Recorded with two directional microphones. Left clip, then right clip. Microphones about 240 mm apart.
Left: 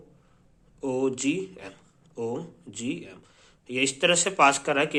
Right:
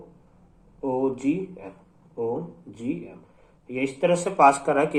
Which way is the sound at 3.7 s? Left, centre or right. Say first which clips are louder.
Even; left.